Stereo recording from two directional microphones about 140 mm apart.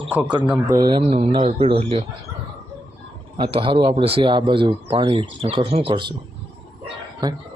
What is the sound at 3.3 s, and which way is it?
Speech, 40° right (ahead or behind).